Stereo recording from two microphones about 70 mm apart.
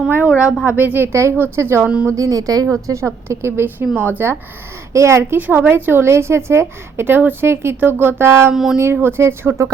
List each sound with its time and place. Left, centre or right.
0.6 s a woman's voice: right
2.0 s speech: right
2.6 s a woman's voice: right
4.9 s a woman's voice: right
5.4 s a woman's voice: right
8.5 s speech: centre
8.8 s a woman's voice: right